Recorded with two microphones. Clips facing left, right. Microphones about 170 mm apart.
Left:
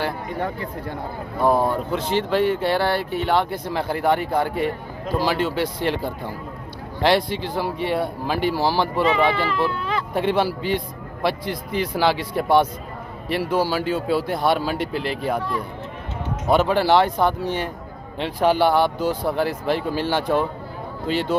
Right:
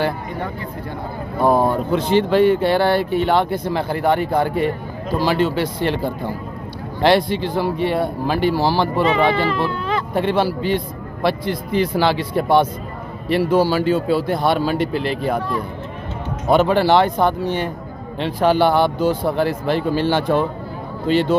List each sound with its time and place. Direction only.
1.4 s speech: 25° right (ahead or behind)
1.9 s speech: centre (ahead or behind)
7.0 s speech: 5° left (ahead or behind)
10.1 s speech: 10° left (ahead or behind)
16.5 s speech: 5° left (ahead or behind)